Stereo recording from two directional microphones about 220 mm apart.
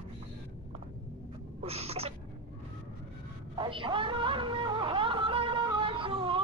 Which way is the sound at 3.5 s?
20° right (ahead or behind).